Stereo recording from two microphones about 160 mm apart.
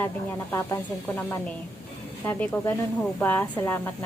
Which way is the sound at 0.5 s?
20° left (ahead or behind).